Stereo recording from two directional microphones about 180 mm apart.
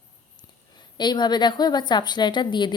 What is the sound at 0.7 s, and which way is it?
A woman's voice, 25° left (ahead or behind).